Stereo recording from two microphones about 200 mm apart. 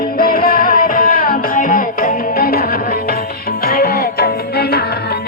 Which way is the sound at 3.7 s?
50° left (ahead or behind).